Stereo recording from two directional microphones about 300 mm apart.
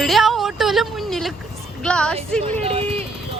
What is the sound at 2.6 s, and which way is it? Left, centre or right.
Speech, centre.